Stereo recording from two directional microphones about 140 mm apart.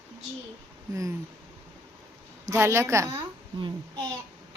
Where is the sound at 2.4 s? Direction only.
20° right (ahead or behind).